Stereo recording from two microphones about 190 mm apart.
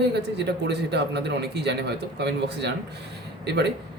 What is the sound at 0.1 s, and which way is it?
A man's voice, 60° right (ahead or behind).